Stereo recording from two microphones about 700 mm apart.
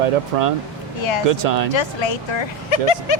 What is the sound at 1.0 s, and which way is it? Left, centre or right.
Speech, left.